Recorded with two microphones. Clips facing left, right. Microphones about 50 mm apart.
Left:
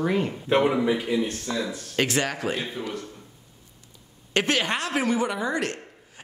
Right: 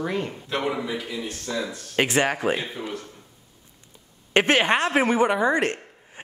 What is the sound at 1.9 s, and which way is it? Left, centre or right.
Speech, right.